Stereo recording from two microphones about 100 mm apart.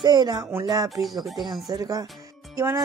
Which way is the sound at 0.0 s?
45° right (ahead or behind).